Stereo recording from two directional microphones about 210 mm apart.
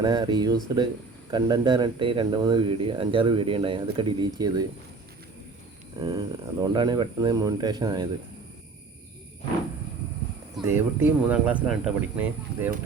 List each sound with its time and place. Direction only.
0.0 s speech: 20° right (ahead or behind)
6.0 s speech: 20° right (ahead or behind)
10.7 s speech: 10° right (ahead or behind)